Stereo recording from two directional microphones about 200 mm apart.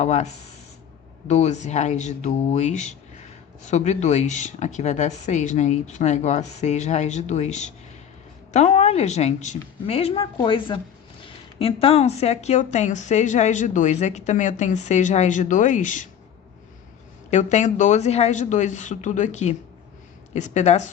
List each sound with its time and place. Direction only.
0.0 s speech: 35° left (ahead or behind)
1.3 s a woman's voice: 35° left (ahead or behind)
17.3 s speech: 35° left (ahead or behind)